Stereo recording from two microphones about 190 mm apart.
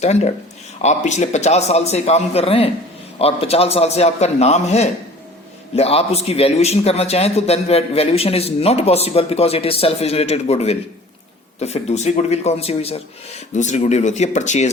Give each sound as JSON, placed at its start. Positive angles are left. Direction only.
{"t": 0.0, "sound": "a man's voice", "side_deg": 35}